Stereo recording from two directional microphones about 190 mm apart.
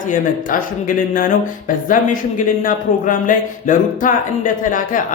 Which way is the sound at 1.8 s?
45° left (ahead or behind).